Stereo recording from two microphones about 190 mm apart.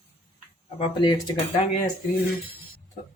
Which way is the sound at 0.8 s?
25° left (ahead or behind).